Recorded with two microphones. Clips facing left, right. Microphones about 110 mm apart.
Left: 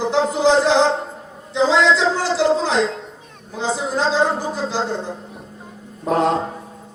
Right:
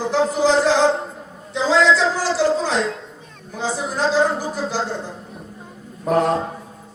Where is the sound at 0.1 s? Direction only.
20° left (ahead or behind).